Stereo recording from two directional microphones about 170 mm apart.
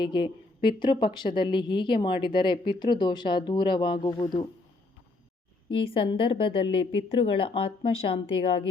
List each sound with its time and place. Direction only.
0.0 s a woman's voice: 30° left (ahead or behind)
5.9 s a woman's voice: 30° left (ahead or behind)